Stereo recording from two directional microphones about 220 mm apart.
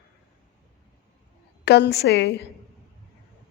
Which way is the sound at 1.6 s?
50° left (ahead or behind).